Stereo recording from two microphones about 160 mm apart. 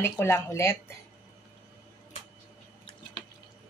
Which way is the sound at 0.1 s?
15° left (ahead or behind).